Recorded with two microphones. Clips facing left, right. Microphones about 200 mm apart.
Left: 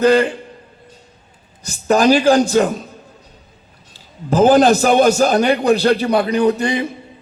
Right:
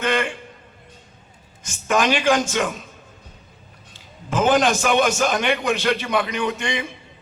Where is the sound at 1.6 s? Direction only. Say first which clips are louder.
Left 7 dB; 35° left (ahead or behind).